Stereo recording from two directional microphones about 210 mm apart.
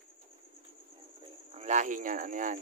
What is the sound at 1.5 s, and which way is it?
Speech, 35° right (ahead or behind).